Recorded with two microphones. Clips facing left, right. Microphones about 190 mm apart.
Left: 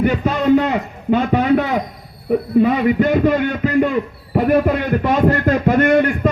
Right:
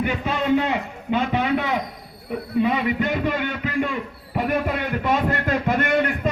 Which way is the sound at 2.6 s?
45° left (ahead or behind).